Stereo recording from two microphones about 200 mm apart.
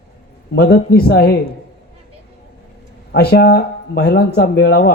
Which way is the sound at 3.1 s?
55° left (ahead or behind).